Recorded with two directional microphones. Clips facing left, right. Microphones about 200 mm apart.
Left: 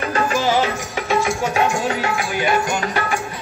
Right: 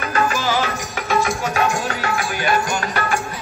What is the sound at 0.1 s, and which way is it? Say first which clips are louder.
Music: left 1 dB; 25° left (ahead or behind).